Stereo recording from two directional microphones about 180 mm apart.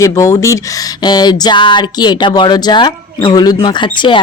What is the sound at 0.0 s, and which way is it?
Speech, 15° left (ahead or behind).